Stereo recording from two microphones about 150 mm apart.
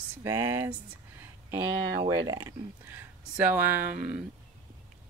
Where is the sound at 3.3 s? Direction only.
10° right (ahead or behind).